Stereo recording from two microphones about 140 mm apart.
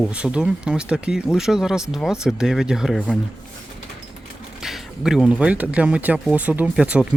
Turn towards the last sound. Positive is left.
turn(degrees=-5)  # may be behind; listen again after turning